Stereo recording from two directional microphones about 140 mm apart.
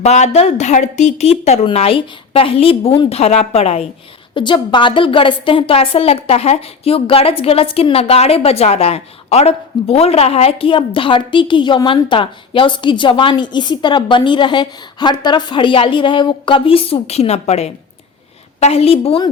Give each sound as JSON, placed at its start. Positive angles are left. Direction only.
{"t": 0.0, "sound": "a woman's voice", "side_deg": 55}
{"t": 4.4, "sound": "a woman's voice", "side_deg": 35}